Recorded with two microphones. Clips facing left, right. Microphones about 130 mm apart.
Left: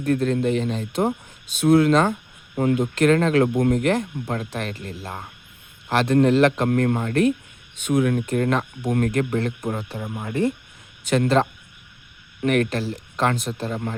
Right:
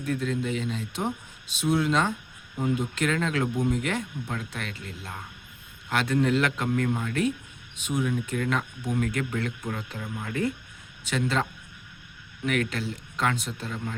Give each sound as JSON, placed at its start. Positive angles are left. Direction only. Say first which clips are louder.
{"t": 0.0, "sound": "speech", "louder": "left 8 dB", "side_deg": 55}
{"t": 1.6, "sound": "speech", "louder": "left 8 dB", "side_deg": 60}
{"t": 2.6, "sound": "speech", "louder": "left 7 dB", "side_deg": 75}
{"t": 2.8, "sound": "speech", "louder": "left 9 dB", "side_deg": 50}
{"t": 6.7, "sound": "speech", "louder": "left 6 dB", "side_deg": 55}
{"t": 7.9, "sound": "speech", "louder": "left 7 dB", "side_deg": 65}
{"t": 8.4, "sound": "speech", "louder": "left 6 dB", "side_deg": 45}
{"t": 11.1, "sound": "speech", "louder": "left 8 dB", "side_deg": 50}